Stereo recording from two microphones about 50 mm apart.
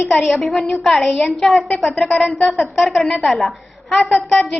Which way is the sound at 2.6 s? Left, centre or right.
Centre.